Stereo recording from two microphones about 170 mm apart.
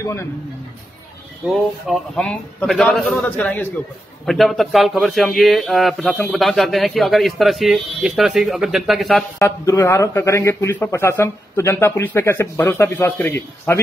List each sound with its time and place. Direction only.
0.0 s speech: 15° left (ahead or behind)
1.5 s a man's voice: centre (ahead or behind)
4.3 s a man's voice: centre (ahead or behind)
9.4 s speech: 20° left (ahead or behind)